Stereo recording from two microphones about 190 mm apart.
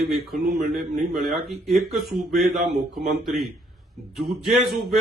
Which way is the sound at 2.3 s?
50° right (ahead or behind).